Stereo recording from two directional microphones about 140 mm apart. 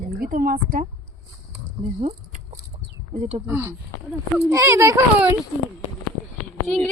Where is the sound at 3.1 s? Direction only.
50° right (ahead or behind).